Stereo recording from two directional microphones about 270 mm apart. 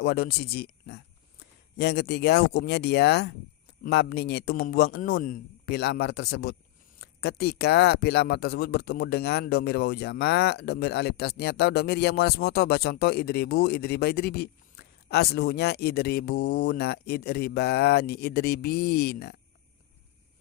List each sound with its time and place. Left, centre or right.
0.0 s speech: left
7.0 s a sound: left
7.6 s speech: left